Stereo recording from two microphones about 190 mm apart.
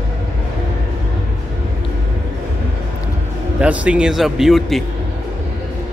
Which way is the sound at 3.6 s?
5° right (ahead or behind).